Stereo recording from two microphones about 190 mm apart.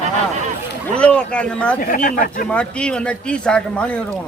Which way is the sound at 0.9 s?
5° left (ahead or behind).